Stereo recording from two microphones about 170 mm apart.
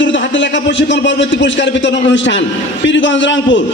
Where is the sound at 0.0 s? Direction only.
90° left.